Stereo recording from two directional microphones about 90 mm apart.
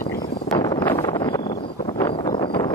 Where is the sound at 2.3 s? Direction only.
60° left (ahead or behind).